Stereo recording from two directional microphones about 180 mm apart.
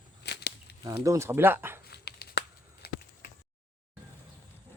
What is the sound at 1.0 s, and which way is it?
Speech, 15° right (ahead or behind).